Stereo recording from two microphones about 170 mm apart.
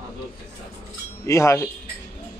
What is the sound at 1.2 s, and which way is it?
Speech, 15° left (ahead or behind).